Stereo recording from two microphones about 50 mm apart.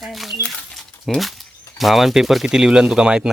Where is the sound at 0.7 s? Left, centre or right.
Centre.